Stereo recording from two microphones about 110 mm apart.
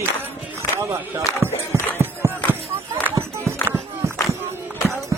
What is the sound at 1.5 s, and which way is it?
Music, 20° left (ahead or behind).